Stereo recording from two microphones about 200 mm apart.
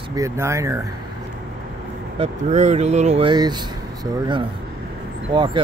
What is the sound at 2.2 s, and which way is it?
Speech, 35° right (ahead or behind).